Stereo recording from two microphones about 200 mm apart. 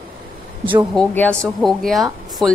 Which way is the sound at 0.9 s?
5° left (ahead or behind).